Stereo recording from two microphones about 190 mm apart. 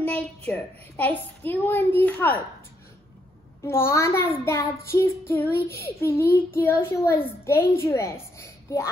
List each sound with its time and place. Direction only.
0.0 s a child's voice: 10° left (ahead or behind)
3.6 s a child's voice: 15° left (ahead or behind)